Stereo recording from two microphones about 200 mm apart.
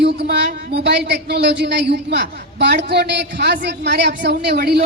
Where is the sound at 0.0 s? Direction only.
55° right (ahead or behind).